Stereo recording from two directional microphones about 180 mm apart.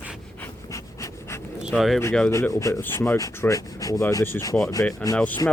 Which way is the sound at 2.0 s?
10° left (ahead or behind).